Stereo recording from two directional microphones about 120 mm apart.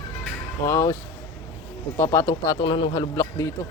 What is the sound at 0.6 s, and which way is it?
Speech, 25° left (ahead or behind).